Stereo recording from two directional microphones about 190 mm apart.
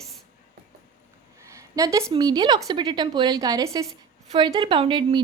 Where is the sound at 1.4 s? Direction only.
15° right (ahead or behind).